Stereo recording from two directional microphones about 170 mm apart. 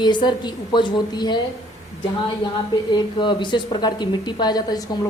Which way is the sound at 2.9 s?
25° left (ahead or behind).